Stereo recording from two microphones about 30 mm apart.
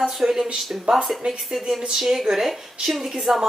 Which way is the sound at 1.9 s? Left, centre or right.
Centre.